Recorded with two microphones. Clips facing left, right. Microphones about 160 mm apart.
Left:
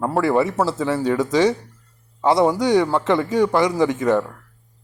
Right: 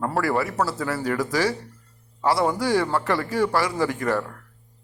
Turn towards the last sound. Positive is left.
turn(degrees=20)  # may be behind; listen again after turning